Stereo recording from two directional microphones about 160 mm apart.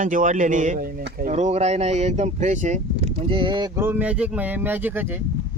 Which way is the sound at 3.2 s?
30° right (ahead or behind).